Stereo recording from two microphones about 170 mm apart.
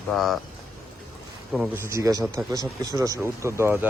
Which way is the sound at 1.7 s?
15° right (ahead or behind).